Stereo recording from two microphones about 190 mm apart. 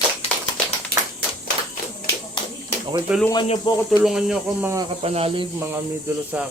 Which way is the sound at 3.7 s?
25° left (ahead or behind).